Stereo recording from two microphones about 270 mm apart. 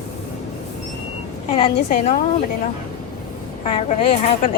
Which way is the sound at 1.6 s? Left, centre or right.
Left.